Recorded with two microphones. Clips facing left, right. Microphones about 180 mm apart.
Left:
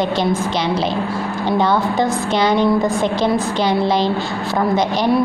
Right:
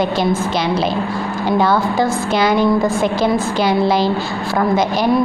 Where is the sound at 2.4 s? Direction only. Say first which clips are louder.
Right 1 dB; 10° right (ahead or behind).